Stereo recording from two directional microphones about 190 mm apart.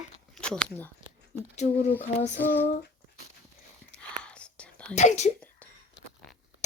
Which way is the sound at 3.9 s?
5° left (ahead or behind).